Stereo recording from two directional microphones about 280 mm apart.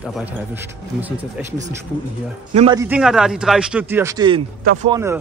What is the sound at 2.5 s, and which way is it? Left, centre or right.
Speech, right.